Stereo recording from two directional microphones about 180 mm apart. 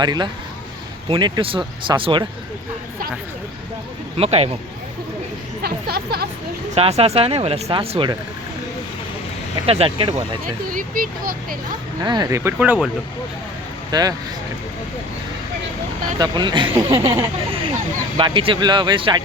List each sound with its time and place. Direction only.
0.0 s speech: 20° right (ahead or behind)
4.2 s speech: 35° right (ahead or behind)
5.6 s speech: 60° right (ahead or behind)
6.7 s speech: 35° right (ahead or behind)
9.6 s speech: 30° right (ahead or behind)
10.4 s speech: 50° right (ahead or behind)
12.0 s speech: 25° right (ahead or behind)
13.9 s speech: 20° right (ahead or behind)
16.1 s speech: 25° right (ahead or behind)